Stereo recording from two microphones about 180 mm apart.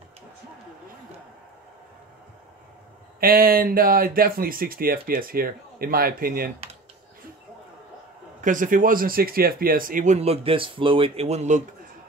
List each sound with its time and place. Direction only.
3.2 s speech: 55° right (ahead or behind)
8.4 s speech: 45° right (ahead or behind)